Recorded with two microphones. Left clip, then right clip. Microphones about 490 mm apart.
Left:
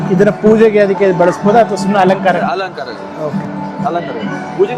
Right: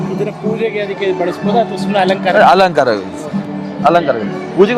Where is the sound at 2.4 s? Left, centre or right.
Right.